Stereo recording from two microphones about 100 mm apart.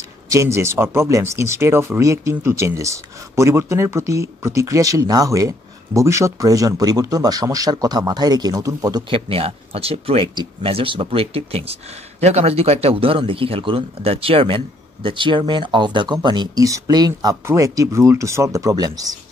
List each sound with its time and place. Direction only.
0.3 s speech: 30° right (ahead or behind)
9.1 s speech: 70° right (ahead or behind)
10.2 s speech: 45° right (ahead or behind)
10.6 s speech: 65° right (ahead or behind)
12.2 s speech: 90° right; by 14.6 s 65° right (ahead or behind)
15.0 s speech: 55° right (ahead or behind)
16.6 s speech: 35° right (ahead or behind)